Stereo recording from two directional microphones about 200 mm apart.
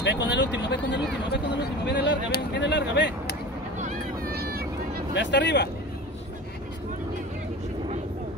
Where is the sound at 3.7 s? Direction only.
40° right (ahead or behind).